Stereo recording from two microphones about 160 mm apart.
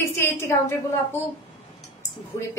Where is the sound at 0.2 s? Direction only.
15° left (ahead or behind).